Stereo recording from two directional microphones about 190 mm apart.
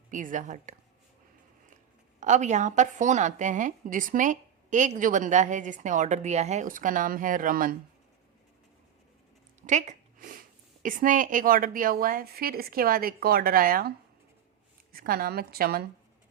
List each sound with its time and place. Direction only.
0.1 s a woman's voice: 40° right (ahead or behind)
2.2 s a woman's voice: 40° right (ahead or behind)
9.6 s a sound: 40° right (ahead or behind)
10.8 s a woman's voice: 45° right (ahead or behind)
14.9 s a woman's voice: 50° right (ahead or behind)